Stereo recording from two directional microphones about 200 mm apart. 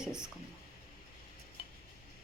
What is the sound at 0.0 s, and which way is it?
Speech, 5° right (ahead or behind).